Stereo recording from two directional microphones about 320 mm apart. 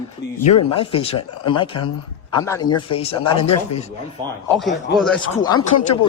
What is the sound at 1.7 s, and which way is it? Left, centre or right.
Speech, left.